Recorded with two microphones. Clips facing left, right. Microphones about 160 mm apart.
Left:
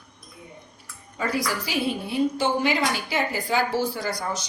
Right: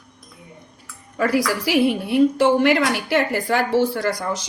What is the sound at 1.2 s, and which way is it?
A woman's voice, 90° right.